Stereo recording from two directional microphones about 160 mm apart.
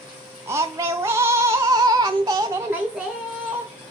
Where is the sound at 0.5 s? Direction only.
20° right (ahead or behind).